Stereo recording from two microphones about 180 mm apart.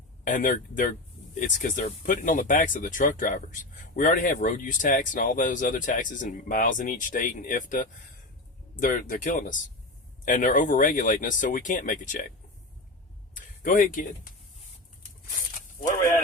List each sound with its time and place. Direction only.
0.3 s speech: 45° left (ahead or behind)
13.3 s speech: 50° left (ahead or behind)